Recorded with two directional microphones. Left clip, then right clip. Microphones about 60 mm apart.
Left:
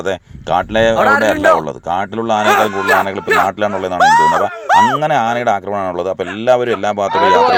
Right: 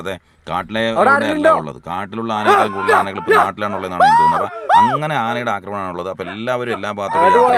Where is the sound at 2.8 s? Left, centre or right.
Right.